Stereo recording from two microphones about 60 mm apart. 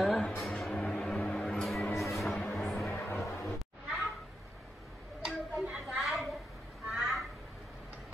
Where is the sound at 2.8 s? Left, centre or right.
Left.